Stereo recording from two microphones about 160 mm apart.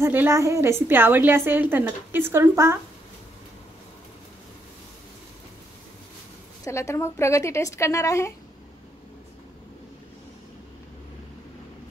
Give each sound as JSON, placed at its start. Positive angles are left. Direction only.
{"t": 0.0, "sound": "a woman's voice", "side_deg": -15}
{"t": 6.6, "sound": "a woman's voice", "side_deg": 20}